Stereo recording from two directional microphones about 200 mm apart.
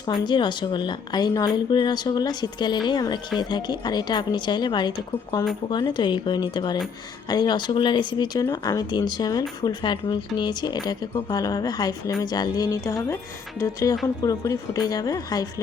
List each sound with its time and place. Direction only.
0.0 s speech: 20° left (ahead or behind)